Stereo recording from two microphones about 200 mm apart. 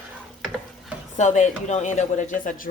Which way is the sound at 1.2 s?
35° left (ahead or behind).